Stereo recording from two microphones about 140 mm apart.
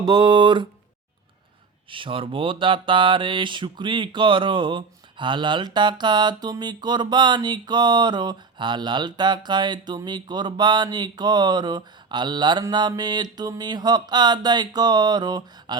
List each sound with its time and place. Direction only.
0.0 s speech: 30° right (ahead or behind)
1.9 s speech: 40° right (ahead or behind)
12.9 s a sound: 30° right (ahead or behind)